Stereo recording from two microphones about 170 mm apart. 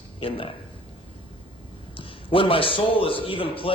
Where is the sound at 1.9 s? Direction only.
30° left (ahead or behind).